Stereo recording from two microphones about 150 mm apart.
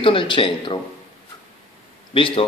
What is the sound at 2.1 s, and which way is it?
Speech, 35° left (ahead or behind).